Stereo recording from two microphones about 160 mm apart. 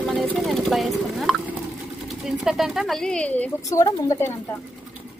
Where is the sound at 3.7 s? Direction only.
20° left (ahead or behind).